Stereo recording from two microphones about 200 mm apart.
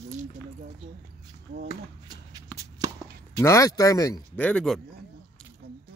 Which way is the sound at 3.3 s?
15° left (ahead or behind).